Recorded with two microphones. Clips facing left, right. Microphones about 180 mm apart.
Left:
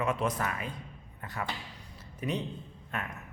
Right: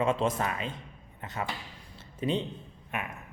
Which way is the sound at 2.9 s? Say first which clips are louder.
Right 2 dB; 15° right (ahead or behind).